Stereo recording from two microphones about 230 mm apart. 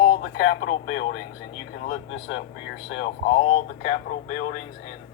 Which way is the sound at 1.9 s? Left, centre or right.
Left.